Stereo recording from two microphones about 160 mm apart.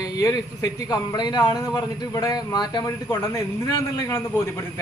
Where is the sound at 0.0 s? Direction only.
20° left (ahead or behind).